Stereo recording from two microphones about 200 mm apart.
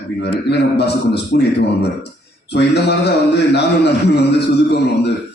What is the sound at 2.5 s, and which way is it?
A man's voice, 55° left (ahead or behind).